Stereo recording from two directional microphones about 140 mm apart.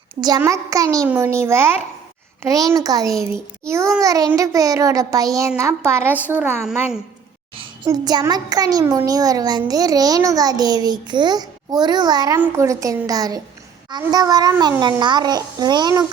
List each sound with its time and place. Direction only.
0.2 s a child's voice: 25° right (ahead or behind)
7.9 s a child's voice: 30° right (ahead or behind)